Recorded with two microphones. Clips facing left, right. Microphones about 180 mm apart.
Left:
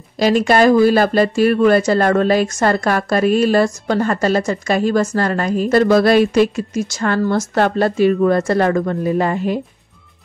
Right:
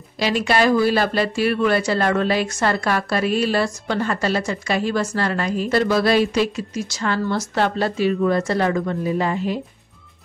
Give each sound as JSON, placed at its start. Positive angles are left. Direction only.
{"t": 0.2, "sound": "speech", "side_deg": 45}